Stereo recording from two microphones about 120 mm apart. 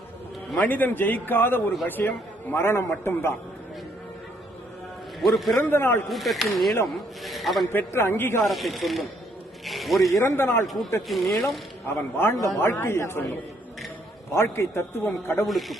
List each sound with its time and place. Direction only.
0.6 s a man's voice: 15° left (ahead or behind)
5.2 s speech: centre (ahead or behind)
5.6 s a man's voice: 20° left (ahead or behind)
6.1 s speech: centre (ahead or behind)
7.7 s a man's voice: 20° left (ahead or behind)
8.4 s speech: centre (ahead or behind)
10.2 s a man's voice: 20° left (ahead or behind)
11.1 s speech: centre (ahead or behind)
11.9 s a man's voice: 20° left (ahead or behind)
15.4 s speech: centre (ahead or behind)